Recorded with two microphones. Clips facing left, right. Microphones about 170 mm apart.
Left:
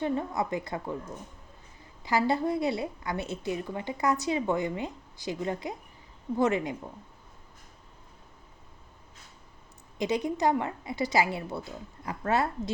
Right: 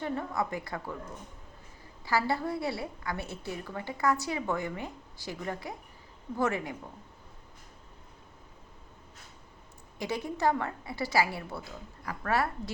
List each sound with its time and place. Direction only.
0.0 s a woman's voice: 20° left (ahead or behind)
2.0 s a woman's voice: 20° left (ahead or behind)
10.0 s a woman's voice: 20° left (ahead or behind)